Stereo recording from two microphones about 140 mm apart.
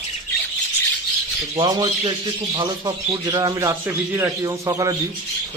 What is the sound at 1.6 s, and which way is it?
A man's voice, 30° right (ahead or behind).